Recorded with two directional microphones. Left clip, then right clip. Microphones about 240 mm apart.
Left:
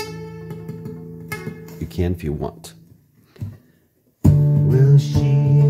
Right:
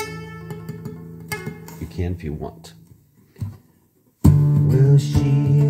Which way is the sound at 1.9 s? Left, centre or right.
Left.